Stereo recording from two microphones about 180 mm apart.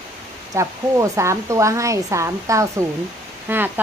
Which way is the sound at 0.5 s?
15° right (ahead or behind).